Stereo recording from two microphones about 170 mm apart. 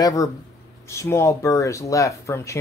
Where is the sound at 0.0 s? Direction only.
20° left (ahead or behind).